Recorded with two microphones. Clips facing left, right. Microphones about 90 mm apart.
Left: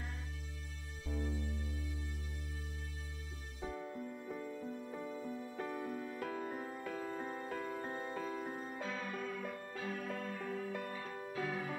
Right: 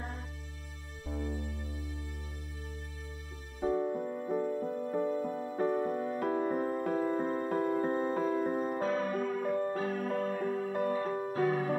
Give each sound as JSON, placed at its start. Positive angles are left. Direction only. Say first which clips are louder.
{"t": 1.0, "sound": "music", "louder": "right 4 dB", "side_deg": -45}
{"t": 3.6, "sound": "music", "louder": "right 13 dB", "side_deg": -45}